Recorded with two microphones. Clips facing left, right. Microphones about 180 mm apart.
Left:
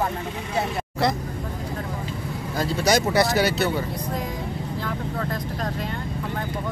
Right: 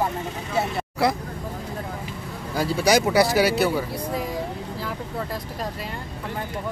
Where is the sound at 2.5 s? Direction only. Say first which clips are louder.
Right 2 dB; 10° right (ahead or behind).